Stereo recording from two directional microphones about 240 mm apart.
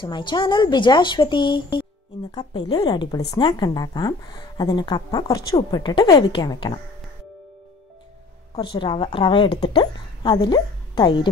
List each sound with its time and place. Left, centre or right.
0.0 s a woman's voice: centre
8.5 s a woman's voice: centre